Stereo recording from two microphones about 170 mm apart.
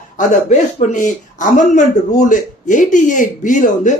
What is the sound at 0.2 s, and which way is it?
A man's voice, 45° left (ahead or behind).